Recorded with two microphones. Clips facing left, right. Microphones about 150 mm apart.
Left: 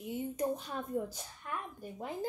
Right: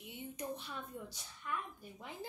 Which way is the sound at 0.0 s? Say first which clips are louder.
Left 10 dB; 45° left (ahead or behind).